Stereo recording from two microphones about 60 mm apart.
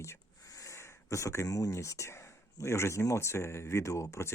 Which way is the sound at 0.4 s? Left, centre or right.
Left.